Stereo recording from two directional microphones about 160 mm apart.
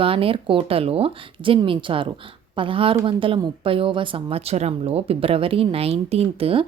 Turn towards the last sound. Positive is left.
turn(degrees=-35)  # may be behind; listen again after turning